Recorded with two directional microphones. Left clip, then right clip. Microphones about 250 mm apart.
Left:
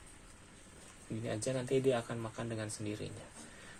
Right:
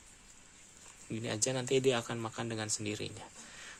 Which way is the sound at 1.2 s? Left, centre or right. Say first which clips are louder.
Right 2 dB; right.